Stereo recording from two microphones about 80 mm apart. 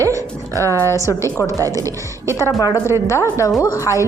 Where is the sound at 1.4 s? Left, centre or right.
Right.